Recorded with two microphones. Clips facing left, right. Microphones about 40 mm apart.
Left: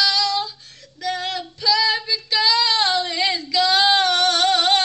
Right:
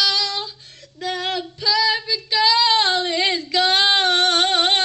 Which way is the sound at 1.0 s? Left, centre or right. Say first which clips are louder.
Right 1 dB; right.